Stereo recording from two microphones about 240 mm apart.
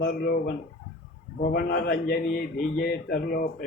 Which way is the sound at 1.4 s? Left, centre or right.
Left.